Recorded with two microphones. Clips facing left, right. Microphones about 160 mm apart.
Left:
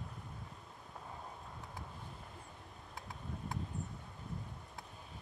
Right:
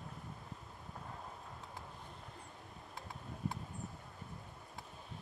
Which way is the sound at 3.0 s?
5° right (ahead or behind).